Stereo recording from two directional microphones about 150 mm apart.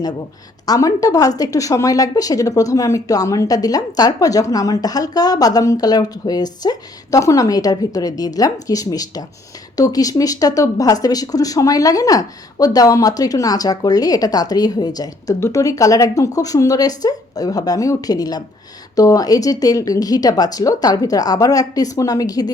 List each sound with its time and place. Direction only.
0.6 s speech: 25° left (ahead or behind)